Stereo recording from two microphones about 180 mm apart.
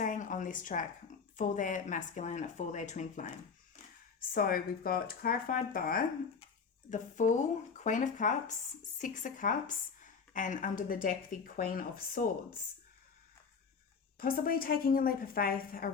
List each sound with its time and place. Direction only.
0.0 s a sound: 45° left (ahead or behind)
1.4 s speech: 45° left (ahead or behind)
4.2 s speech: 55° left (ahead or behind)
14.2 s a woman's voice: 55° left (ahead or behind)